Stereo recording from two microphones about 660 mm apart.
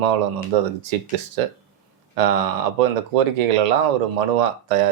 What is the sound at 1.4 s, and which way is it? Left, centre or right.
Speech, right.